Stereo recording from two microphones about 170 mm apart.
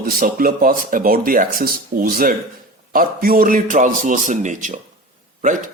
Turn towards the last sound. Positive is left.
turn(degrees=-50)  # may be behind; listen again after turning